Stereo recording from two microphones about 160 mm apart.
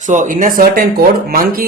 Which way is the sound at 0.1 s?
50° right (ahead or behind).